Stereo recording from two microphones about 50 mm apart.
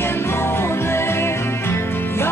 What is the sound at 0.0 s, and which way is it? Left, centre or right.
Music, left.